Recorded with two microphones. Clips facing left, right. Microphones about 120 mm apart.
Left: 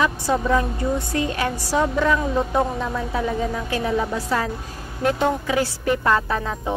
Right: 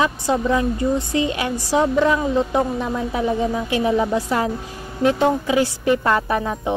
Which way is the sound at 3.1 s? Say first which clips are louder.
Right 4 dB; 15° right (ahead or behind).